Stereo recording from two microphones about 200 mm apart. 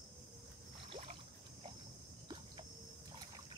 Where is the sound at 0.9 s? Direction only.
35° right (ahead or behind).